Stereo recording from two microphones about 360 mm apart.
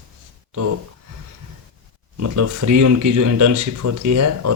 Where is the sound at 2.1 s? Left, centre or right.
Right.